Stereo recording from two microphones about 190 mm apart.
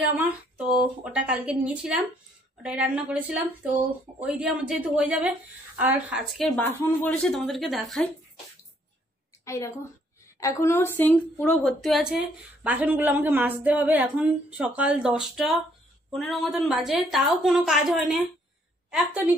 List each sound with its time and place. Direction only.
1.0 s a woman's voice: 5° right (ahead or behind)
6.6 s a woman's voice: 10° left (ahead or behind)
9.4 s a woman's voice: 15° left (ahead or behind); by 19.3 s 5° right (ahead or behind)